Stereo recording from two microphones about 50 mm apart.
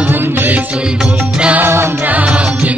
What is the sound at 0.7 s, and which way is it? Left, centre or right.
Music, centre.